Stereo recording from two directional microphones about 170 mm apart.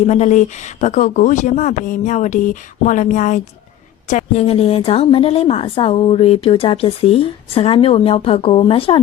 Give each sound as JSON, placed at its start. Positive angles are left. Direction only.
{"t": 0.0, "sound": "speech", "side_deg": 45}
{"t": 4.2, "sound": "a woman's voice", "side_deg": 35}